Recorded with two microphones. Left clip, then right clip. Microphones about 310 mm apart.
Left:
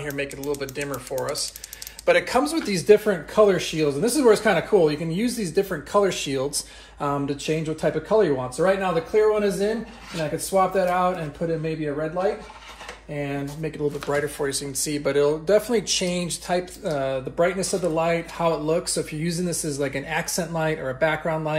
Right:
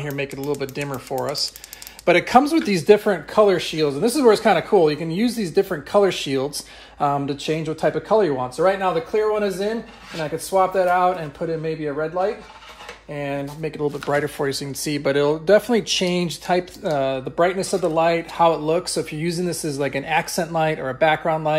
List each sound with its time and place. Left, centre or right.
0.0 s speech: centre
13.1 s speech: right